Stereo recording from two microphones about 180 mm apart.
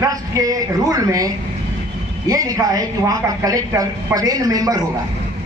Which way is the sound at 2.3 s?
20° right (ahead or behind).